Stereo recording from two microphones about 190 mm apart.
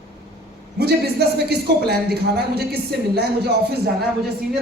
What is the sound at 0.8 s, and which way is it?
A man's voice, 55° right (ahead or behind).